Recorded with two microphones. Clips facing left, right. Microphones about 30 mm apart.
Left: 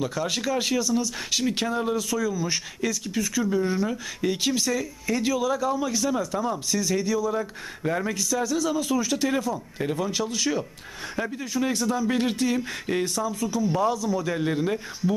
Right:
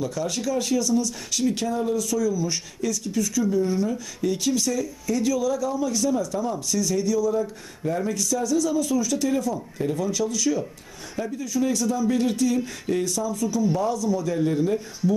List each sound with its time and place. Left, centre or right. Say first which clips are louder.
0.0 s speech: even; left